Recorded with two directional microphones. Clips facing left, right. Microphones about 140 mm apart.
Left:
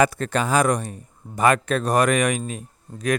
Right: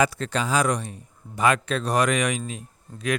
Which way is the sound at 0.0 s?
50° left (ahead or behind).